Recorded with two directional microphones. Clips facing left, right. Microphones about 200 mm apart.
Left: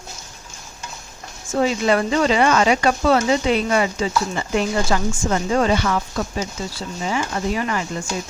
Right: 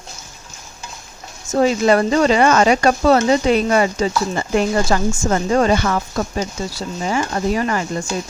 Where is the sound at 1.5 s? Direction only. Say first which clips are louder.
Right 4 dB; 45° right (ahead or behind).